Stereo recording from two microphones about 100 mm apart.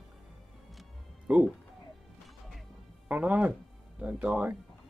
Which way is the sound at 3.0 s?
15° right (ahead or behind).